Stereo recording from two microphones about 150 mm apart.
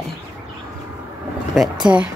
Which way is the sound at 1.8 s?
10° right (ahead or behind).